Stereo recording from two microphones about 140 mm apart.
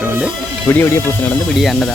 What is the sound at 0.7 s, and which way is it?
Speech, 15° left (ahead or behind).